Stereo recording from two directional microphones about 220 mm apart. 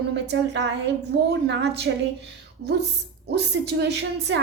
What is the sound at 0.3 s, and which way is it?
A woman's voice, 55° right (ahead or behind).